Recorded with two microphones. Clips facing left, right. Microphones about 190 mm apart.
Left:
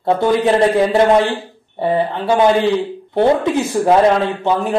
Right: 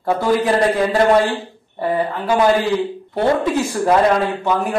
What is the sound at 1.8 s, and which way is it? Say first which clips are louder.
Speech: left 3 dB; 25° left (ahead or behind).